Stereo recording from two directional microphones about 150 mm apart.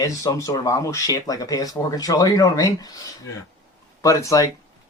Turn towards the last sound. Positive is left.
turn(degrees=20)  # may be behind; listen again after turning